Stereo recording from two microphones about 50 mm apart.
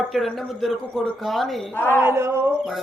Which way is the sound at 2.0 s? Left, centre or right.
Right.